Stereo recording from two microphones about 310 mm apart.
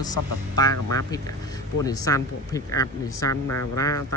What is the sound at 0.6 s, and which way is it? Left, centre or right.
Speech, centre.